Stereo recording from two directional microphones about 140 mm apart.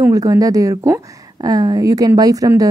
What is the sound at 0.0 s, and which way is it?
A woman's voice, 25° right (ahead or behind).